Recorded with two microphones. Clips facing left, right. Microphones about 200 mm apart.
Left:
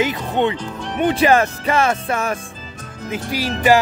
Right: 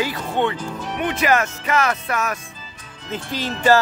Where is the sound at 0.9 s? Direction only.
30° left (ahead or behind).